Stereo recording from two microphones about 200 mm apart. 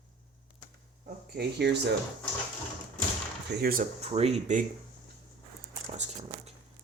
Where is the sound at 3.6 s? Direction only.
50° right (ahead or behind).